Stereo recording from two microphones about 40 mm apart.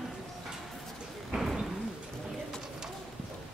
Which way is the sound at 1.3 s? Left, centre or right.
Centre.